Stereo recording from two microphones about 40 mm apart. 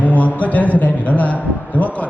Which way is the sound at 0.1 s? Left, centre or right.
Left.